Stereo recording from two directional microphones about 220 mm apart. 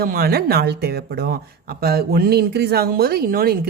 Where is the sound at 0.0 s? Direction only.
45° right (ahead or behind).